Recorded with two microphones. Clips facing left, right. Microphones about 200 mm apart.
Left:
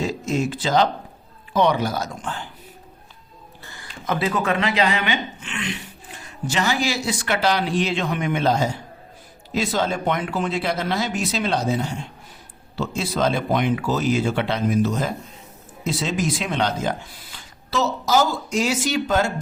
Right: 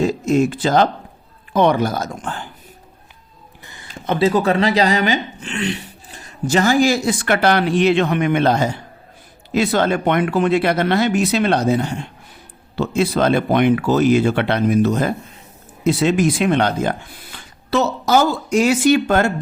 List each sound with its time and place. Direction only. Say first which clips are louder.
0.0 s speech: right 7 dB; 55° right (ahead or behind)
3.6 s a sound: right 1 dB; 20° right (ahead or behind)
4.0 s speech: right 7 dB; 30° right (ahead or behind); by 19.3 s 60° right (ahead or behind)